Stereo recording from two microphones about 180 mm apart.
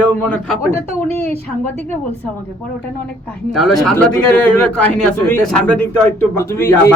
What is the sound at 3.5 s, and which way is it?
A man's voice, centre (ahead or behind).